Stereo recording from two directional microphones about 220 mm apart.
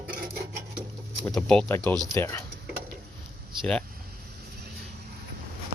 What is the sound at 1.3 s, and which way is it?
Speech, 5° left (ahead or behind).